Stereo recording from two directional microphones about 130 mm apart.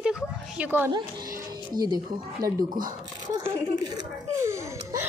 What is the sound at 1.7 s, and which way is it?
Speech, 30° right (ahead or behind).